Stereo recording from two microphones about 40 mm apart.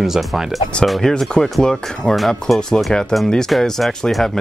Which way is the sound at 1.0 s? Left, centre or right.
Centre.